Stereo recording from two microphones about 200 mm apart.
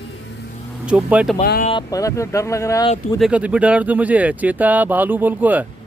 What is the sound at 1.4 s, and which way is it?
Speech, 50° left (ahead or behind).